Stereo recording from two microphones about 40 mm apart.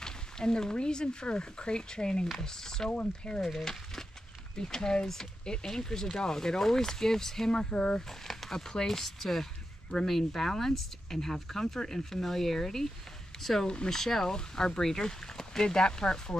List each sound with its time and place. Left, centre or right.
0.0 s speech: centre
2.9 s speech: left
3.3 s speech: centre
8.3 s speech: centre